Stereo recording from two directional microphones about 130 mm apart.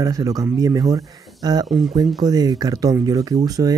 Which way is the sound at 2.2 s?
30° right (ahead or behind).